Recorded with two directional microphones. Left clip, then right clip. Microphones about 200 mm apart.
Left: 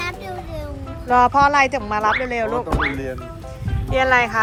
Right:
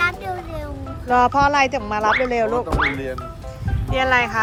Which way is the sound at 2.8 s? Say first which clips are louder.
Right 2 dB; 5° left (ahead or behind).